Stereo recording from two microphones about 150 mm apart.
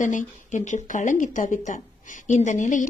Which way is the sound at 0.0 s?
60° left (ahead or behind).